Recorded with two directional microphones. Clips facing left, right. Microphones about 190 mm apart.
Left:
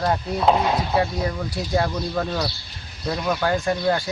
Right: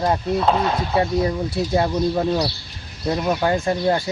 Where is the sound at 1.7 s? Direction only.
20° right (ahead or behind).